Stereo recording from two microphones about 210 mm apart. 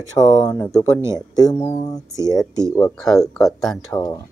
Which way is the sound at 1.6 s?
30° left (ahead or behind).